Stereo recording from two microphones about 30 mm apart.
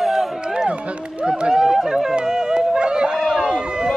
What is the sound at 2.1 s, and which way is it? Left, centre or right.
Music, right.